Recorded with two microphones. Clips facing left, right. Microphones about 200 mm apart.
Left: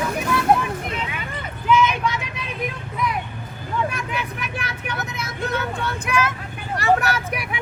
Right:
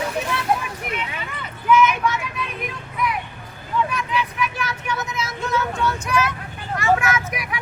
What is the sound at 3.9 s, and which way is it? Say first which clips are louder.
Vehicle: right 3 dB; 50° left (ahead or behind).